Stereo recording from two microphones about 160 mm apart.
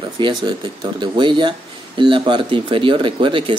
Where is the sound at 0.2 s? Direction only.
30° right (ahead or behind).